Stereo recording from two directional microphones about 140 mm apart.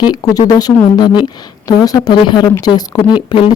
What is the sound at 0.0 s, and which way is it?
Speech, 30° left (ahead or behind).